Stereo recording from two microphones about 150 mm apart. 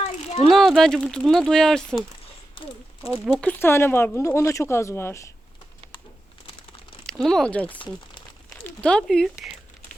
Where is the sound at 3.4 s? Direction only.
10° left (ahead or behind).